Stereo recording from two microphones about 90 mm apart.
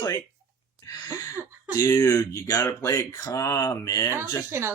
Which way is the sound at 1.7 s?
40° left (ahead or behind).